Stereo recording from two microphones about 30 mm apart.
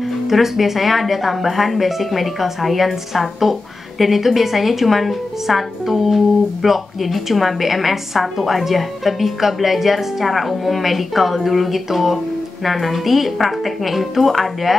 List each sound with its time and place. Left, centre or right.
0.3 s speech: centre